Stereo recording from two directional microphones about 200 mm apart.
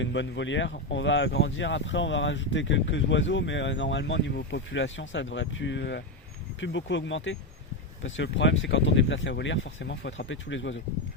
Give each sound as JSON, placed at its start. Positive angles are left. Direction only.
{"t": 0.0, "sound": "speech", "side_deg": 65}